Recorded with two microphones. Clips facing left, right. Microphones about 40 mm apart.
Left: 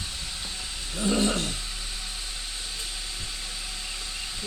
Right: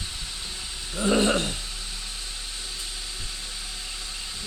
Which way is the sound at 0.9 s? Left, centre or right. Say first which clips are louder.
Right 3 dB; centre.